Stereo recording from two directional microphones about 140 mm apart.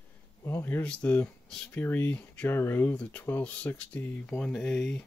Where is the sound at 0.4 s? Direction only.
20° left (ahead or behind).